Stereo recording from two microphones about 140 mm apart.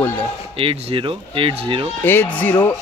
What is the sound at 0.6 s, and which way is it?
Speech, 40° right (ahead or behind).